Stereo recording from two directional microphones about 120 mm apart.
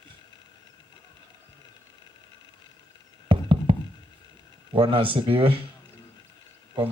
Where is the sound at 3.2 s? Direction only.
45° right (ahead or behind).